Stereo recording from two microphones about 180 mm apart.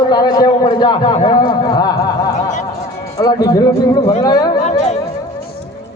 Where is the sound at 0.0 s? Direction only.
25° left (ahead or behind).